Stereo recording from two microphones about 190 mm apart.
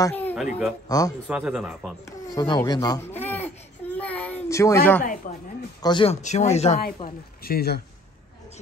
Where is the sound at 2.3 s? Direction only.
20° left (ahead or behind).